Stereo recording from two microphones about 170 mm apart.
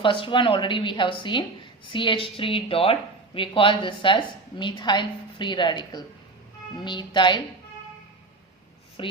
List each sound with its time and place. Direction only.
0.0 s a woman's voice: 30° left (ahead or behind)
9.0 s a woman's voice: 30° left (ahead or behind)